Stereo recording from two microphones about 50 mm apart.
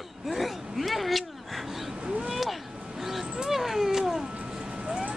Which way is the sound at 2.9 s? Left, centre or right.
Centre.